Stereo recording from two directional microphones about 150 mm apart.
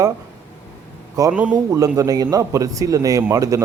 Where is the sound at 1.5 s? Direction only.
25° right (ahead or behind).